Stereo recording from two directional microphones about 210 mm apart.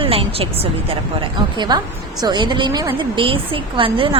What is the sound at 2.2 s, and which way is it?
A woman's voice, 20° right (ahead or behind).